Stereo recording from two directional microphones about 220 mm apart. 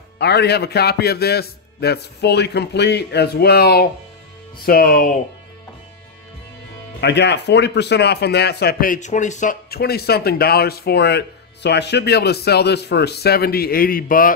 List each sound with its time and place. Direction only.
0.2 s speech: 50° left (ahead or behind)
7.0 s speech: 50° left (ahead or behind)